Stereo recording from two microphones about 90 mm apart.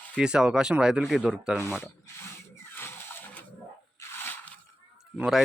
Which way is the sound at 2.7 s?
25° left (ahead or behind).